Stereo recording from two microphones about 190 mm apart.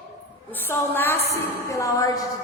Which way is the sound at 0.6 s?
10° left (ahead or behind).